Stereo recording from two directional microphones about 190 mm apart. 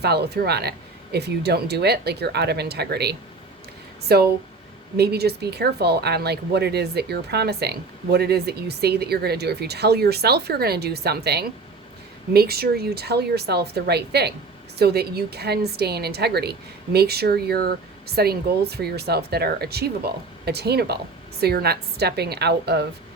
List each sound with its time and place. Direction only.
0.0 s speech: 60° right (ahead or behind)